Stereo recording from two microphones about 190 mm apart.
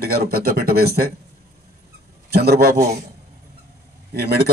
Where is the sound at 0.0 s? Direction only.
55° right (ahead or behind).